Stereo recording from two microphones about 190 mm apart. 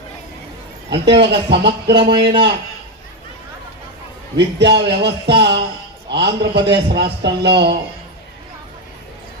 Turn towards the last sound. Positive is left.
turn(degrees=-60)  # may be behind; listen again after turning